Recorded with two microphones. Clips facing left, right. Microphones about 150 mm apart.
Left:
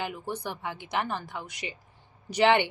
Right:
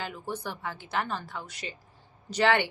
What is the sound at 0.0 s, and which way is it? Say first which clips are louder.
A woman's voice: left 2 dB; 15° left (ahead or behind).